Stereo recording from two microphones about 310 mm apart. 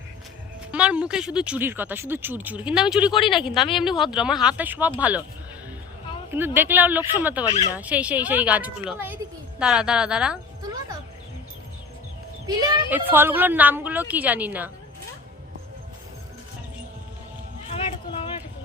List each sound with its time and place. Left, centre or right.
0.7 s speech: centre
6.3 s speech: centre
7.4 s speech: centre
7.8 s speech: centre
12.5 s speech: centre
17.7 s a sound: centre